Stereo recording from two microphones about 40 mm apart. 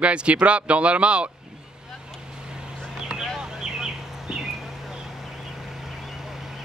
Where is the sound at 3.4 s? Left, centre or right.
Centre.